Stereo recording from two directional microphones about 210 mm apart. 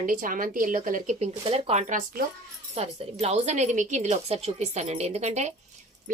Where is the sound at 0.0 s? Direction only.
40° right (ahead or behind).